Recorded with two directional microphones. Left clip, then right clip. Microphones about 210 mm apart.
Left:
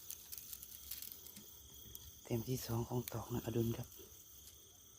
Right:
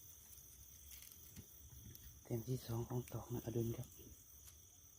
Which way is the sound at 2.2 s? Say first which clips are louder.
Left 4 dB; 10° left (ahead or behind).